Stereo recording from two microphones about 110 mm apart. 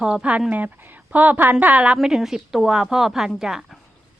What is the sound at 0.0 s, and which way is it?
A woman's voice, 10° right (ahead or behind).